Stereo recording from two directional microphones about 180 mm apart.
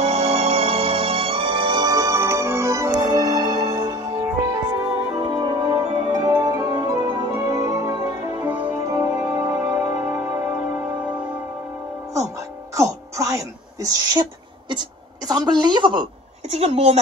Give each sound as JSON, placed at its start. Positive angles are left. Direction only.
{"t": 0.0, "sound": "music", "side_deg": -35}
{"t": 5.6, "sound": "music", "side_deg": -10}
{"t": 6.1, "sound": "music", "side_deg": -20}
{"t": 12.1, "sound": "music", "side_deg": -15}
{"t": 14.7, "sound": "a woman's voice", "side_deg": -25}